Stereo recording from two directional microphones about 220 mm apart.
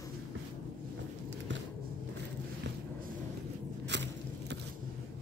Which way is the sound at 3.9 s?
55° right (ahead or behind).